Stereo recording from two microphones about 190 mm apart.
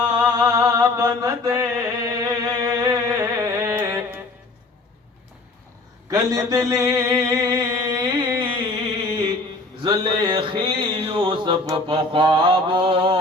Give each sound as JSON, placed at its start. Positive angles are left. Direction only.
{"t": 0.3, "sound": "mantra", "side_deg": -20}
{"t": 6.1, "sound": "mantra", "side_deg": -15}
{"t": 9.8, "sound": "a sound", "side_deg": -25}